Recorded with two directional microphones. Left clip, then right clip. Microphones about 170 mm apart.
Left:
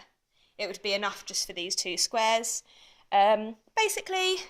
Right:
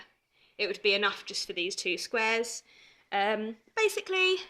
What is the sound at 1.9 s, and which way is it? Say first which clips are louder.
Speech: left 5 dB; 20° left (ahead or behind).